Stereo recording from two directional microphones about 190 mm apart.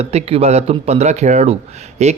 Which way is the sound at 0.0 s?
35° right (ahead or behind).